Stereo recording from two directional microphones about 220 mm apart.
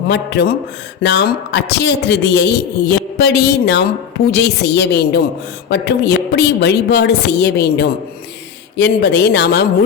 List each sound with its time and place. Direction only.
0.1 s a man's voice: 50° left (ahead or behind)